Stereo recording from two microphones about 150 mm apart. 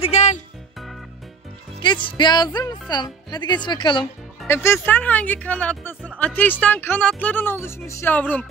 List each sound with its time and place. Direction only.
0.0 s music: 45° left (ahead or behind)
1.8 s speech: 30° left (ahead or behind)
4.5 s speech: 15° left (ahead or behind)